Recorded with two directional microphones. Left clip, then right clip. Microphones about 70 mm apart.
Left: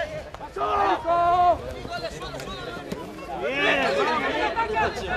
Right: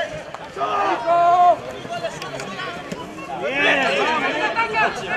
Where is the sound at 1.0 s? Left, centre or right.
Right.